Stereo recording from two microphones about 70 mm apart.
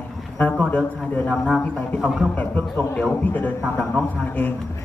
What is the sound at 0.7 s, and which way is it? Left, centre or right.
Speech, centre.